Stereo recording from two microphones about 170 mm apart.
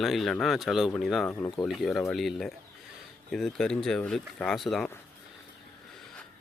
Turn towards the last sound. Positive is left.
turn(degrees=0)  # may be behind; listen again after turning